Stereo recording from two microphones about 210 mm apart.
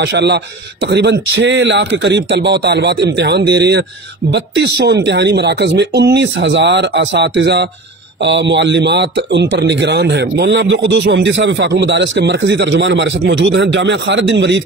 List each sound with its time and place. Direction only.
0.1 s speech: 55° right (ahead or behind)